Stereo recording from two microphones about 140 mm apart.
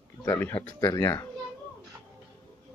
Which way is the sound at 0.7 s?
25° left (ahead or behind).